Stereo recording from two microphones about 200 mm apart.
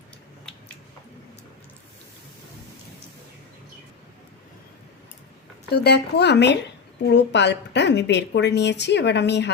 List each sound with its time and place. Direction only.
5.7 s a woman's voice: 55° left (ahead or behind)